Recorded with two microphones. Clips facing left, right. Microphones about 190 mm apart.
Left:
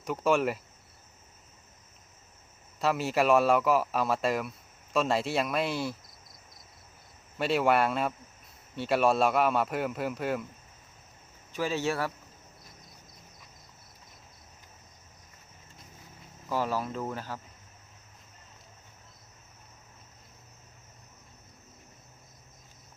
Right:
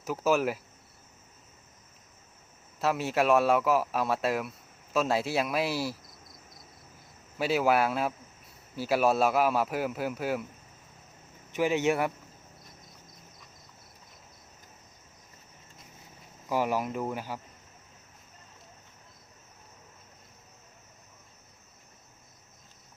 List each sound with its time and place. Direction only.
0.0 s speech: 5° right (ahead or behind)
2.8 s speech: centre (ahead or behind)
7.3 s speech: 5° right (ahead or behind)
11.5 s speech: 20° right (ahead or behind)
16.5 s speech: 15° right (ahead or behind)